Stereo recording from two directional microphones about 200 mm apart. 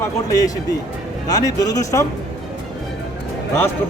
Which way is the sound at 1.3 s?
20° left (ahead or behind).